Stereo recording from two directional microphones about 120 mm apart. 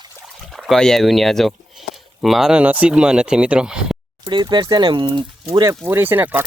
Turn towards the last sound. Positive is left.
turn(degrees=-15)  # may be behind; listen again after turning